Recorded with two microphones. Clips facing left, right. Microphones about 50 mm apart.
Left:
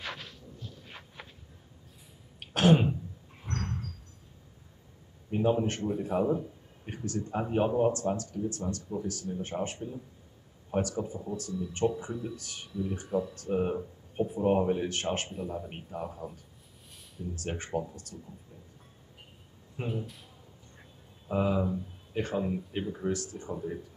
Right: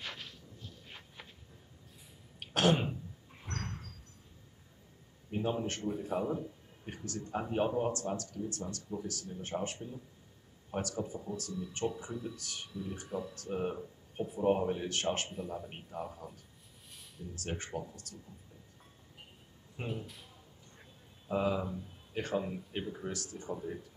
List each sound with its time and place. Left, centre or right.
0.0 s a sound: left
2.5 s throat clearing: centre
3.5 s a sound: centre
5.7 s speech: centre
13.5 s speech: centre
14.9 s speech: centre
17.5 s speech: left
18.1 s speech: centre
19.9 s speech: centre
21.3 s speech: centre